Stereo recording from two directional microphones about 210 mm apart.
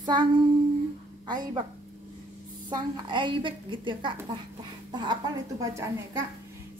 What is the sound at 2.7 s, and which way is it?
A woman's voice, 20° right (ahead or behind).